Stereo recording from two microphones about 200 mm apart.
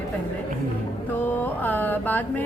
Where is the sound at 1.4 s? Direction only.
10° left (ahead or behind).